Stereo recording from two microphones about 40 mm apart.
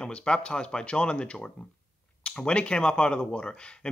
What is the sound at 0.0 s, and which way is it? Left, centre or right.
Speech, left.